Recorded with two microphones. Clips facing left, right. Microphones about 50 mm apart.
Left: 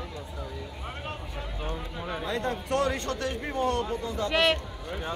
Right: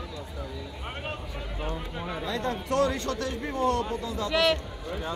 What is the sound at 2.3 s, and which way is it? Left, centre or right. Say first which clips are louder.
A man's voice: even; left.